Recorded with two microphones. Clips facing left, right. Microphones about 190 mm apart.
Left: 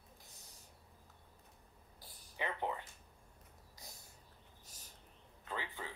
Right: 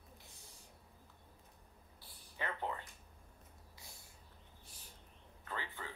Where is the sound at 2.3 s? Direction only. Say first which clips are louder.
Left 2 dB; 15° left (ahead or behind).